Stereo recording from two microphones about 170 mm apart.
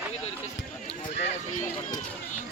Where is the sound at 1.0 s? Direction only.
40° left (ahead or behind).